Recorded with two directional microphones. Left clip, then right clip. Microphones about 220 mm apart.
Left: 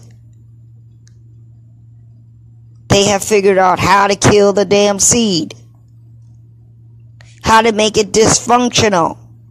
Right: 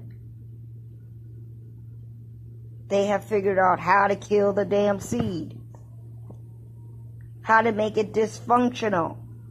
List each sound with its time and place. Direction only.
2.9 s speech: 55° left (ahead or behind)
7.4 s speech: 50° left (ahead or behind)